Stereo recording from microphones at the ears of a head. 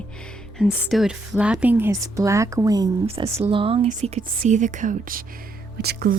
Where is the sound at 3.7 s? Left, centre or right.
Right.